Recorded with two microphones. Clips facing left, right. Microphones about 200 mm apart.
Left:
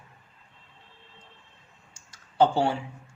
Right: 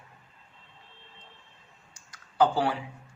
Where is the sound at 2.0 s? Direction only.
25° left (ahead or behind).